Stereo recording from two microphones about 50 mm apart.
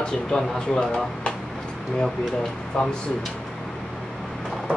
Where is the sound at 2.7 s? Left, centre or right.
Centre.